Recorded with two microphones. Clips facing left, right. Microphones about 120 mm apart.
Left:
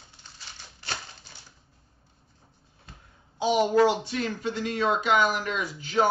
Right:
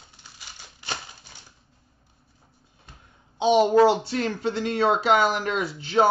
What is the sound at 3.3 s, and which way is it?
A woman's voice, 25° right (ahead or behind).